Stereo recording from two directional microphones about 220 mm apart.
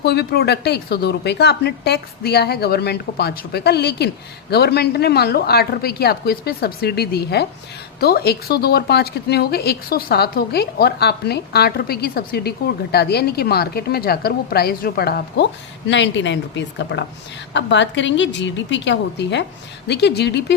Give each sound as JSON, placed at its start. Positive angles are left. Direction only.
{"t": 0.0, "sound": "a woman's voice", "side_deg": 45}